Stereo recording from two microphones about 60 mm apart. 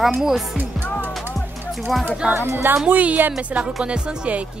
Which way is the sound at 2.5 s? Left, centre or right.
Right.